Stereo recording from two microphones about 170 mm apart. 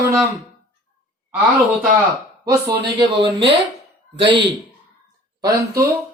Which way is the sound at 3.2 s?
90° right.